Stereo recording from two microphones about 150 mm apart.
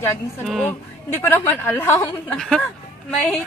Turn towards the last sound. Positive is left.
turn(degrees=5)  # may be behind; listen again after turning